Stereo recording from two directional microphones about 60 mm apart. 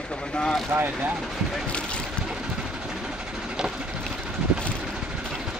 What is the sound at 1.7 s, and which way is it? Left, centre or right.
Speech, centre.